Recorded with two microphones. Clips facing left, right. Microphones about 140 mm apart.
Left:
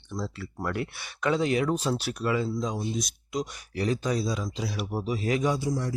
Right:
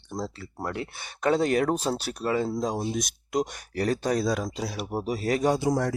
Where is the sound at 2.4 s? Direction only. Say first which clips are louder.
Right 2 dB; 50° right (ahead or behind).